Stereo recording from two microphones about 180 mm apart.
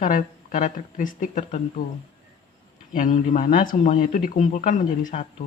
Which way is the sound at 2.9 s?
45° left (ahead or behind).